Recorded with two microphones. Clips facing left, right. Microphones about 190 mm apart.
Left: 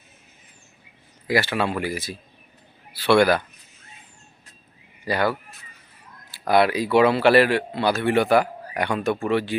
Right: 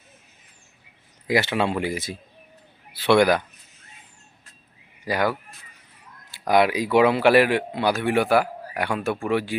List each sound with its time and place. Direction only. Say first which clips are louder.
1.3 s speech: right 1 dB; 20° right (ahead or behind)
5.0 s a man's voice: left 1 dB; 10° right (ahead or behind)
6.5 s a man's voice: even; 15° right (ahead or behind)